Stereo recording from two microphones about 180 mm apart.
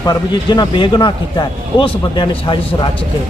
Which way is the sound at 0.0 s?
20° left (ahead or behind).